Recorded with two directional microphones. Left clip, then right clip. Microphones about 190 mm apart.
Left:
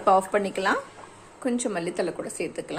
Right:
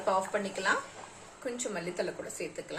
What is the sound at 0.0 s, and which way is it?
Speech, 50° left (ahead or behind).